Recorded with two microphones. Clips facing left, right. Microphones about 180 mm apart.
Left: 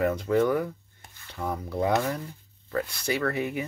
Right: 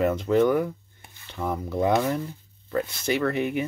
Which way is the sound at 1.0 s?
20° right (ahead or behind).